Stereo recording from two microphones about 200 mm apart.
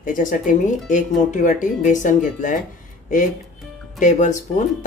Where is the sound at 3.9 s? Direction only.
40° left (ahead or behind).